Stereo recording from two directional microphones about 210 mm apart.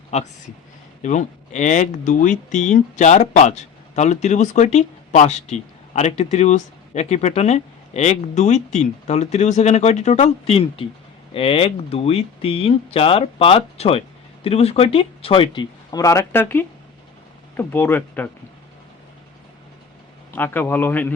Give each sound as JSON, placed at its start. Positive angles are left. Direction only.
{"t": 0.1, "sound": "a man's voice", "side_deg": 30}
{"t": 20.3, "sound": "a man's voice", "side_deg": 10}